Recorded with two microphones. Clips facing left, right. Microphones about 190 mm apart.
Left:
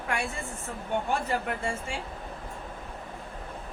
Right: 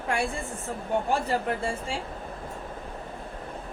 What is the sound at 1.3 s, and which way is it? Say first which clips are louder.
Speech: right 3 dB; 35° right (ahead or behind).